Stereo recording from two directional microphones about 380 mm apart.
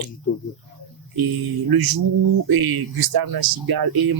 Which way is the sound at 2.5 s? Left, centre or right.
Right.